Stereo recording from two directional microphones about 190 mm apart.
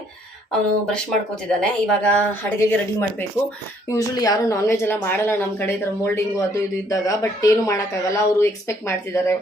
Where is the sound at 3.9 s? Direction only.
15° left (ahead or behind).